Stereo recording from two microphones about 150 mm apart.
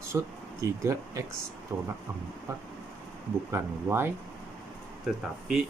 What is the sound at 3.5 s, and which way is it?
Speech, 15° right (ahead or behind).